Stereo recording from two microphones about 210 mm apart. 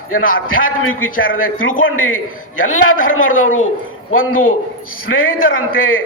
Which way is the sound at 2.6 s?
70° left (ahead or behind).